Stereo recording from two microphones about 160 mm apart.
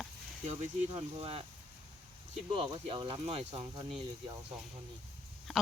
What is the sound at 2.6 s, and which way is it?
Speech, 35° right (ahead or behind).